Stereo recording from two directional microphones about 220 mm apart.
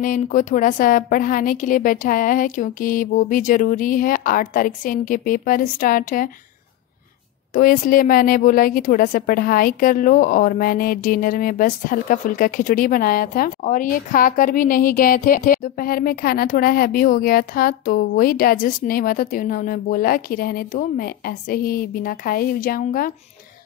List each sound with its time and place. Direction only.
0.0 s a woman's voice: 35° left (ahead or behind)
7.5 s a woman's voice: 40° left (ahead or behind)